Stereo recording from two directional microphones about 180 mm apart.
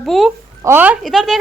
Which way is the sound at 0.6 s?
10° right (ahead or behind).